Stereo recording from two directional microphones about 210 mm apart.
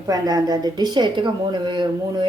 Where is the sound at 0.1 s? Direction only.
20° right (ahead or behind).